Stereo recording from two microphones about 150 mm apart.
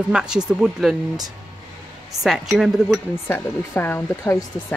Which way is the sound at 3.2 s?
15° left (ahead or behind).